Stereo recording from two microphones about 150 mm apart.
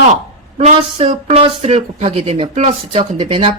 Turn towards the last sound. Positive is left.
turn(degrees=-35)  # may be behind; listen again after turning